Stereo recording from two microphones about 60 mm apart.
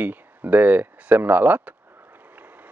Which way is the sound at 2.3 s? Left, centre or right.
Right.